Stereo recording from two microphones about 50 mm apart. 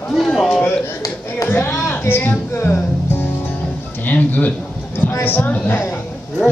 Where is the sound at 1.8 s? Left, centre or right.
Left.